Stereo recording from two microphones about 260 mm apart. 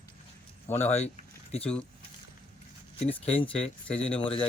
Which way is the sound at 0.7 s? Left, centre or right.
Left.